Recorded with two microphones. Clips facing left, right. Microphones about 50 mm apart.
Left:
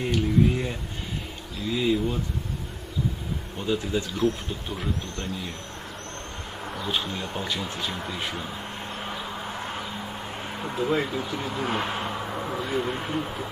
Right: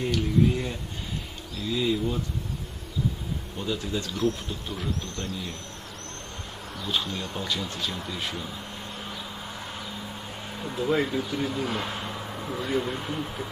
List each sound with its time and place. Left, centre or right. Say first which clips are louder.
0.0 s a sound: left 1 dB; centre
1.6 s speech: left 2 dB; centre
3.5 s speech: left 4 dB; centre
6.8 s speech: even; centre
9.0 s a sound: left 4 dB; left
10.9 s speech: right 3 dB; centre
11.5 s speech: left 2 dB; left